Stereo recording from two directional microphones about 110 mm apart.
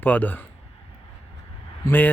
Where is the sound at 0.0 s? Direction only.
15° left (ahead or behind).